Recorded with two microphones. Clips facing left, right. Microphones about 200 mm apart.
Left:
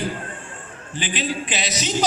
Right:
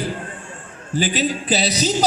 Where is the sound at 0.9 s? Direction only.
40° right (ahead or behind).